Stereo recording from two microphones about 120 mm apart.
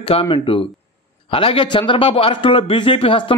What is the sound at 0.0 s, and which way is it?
A man's voice, 50° left (ahead or behind).